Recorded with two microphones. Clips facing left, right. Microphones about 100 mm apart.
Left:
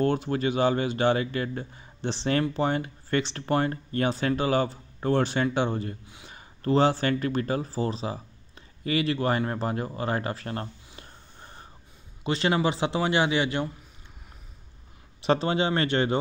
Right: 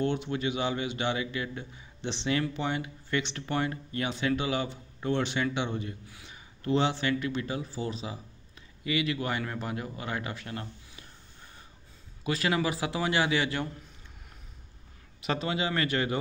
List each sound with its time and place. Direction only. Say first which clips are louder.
0.0 s a man's voice: left 5 dB; 40° left (ahead or behind)
12.2 s a man's voice: left 4 dB; 25° left (ahead or behind)
15.2 s speech: left 6 dB; 30° left (ahead or behind)